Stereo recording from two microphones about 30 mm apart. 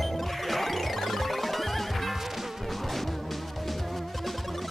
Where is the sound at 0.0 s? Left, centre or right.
Centre.